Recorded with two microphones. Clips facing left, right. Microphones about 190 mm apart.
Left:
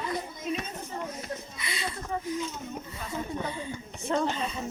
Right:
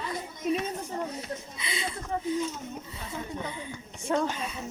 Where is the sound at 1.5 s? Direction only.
20° right (ahead or behind).